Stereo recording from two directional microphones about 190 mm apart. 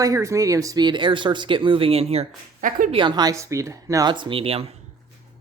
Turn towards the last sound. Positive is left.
turn(degrees=-30)  # may be behind; listen again after turning